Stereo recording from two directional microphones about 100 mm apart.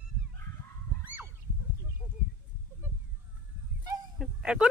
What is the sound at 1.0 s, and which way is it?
Goose, 15° right (ahead or behind).